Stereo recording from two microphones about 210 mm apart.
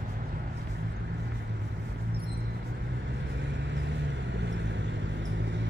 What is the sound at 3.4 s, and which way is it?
Vehicle, 60° right (ahead or behind).